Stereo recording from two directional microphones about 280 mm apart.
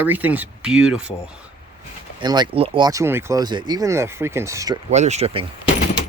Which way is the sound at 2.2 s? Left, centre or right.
Centre.